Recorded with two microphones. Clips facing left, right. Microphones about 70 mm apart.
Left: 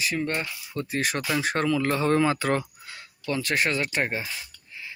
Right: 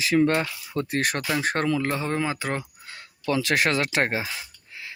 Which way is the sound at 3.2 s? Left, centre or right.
Right.